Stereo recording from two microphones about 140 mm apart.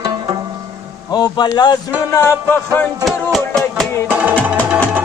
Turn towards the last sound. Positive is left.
turn(degrees=-10)  # may be behind; listen again after turning